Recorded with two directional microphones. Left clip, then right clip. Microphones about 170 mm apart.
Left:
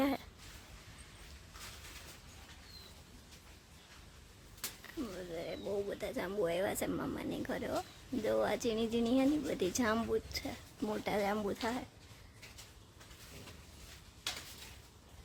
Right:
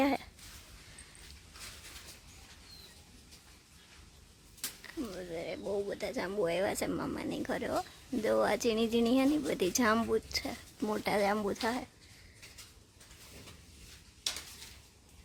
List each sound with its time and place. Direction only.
5.0 s speech: 15° right (ahead or behind)